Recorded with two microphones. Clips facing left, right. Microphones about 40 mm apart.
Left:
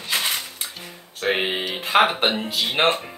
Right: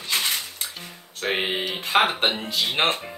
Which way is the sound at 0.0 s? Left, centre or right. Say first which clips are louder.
Left 1 dB; centre.